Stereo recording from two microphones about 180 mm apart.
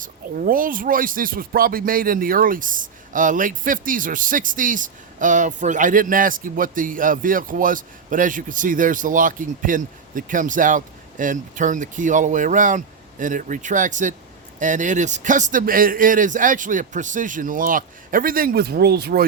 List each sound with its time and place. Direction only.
0.0 s speech: 50° right (ahead or behind)